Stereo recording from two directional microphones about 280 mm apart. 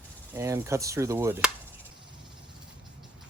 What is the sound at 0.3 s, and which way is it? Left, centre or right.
Speech, centre.